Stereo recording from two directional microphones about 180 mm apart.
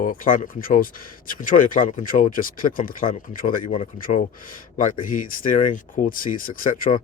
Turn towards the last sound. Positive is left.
turn(degrees=50)  # may be behind; listen again after turning